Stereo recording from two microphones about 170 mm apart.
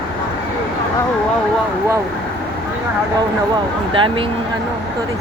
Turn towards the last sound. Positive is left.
turn(degrees=-30)  # may be behind; listen again after turning